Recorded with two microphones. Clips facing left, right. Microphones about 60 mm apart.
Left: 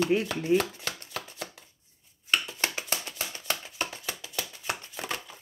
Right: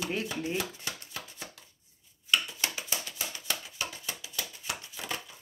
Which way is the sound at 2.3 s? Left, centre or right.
Left.